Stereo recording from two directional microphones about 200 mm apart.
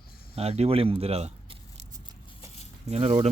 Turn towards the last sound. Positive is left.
turn(degrees=-30)  # may be behind; listen again after turning